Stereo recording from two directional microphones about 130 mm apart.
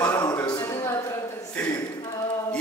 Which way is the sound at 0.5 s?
25° left (ahead or behind).